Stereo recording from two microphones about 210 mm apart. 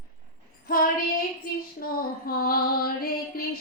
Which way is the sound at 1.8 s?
45° left (ahead or behind).